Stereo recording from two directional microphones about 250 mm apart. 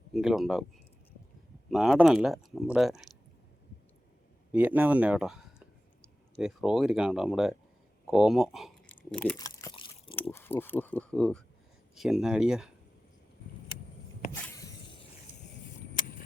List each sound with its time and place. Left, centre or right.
0.1 s speech: centre
1.7 s speech: centre
4.5 s speech: centre
9.4 s a sound: centre
10.3 s speech: centre
14.4 s snake: centre